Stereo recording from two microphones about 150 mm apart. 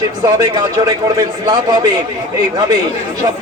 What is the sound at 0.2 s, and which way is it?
A man's voice, 25° right (ahead or behind).